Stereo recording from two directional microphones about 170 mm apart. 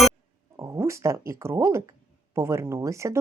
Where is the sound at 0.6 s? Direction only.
15° right (ahead or behind).